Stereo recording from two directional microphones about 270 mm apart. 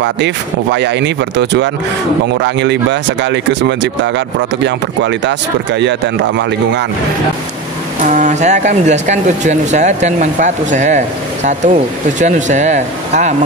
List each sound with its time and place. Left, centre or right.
0.0 s speech: right
8.0 s speech: right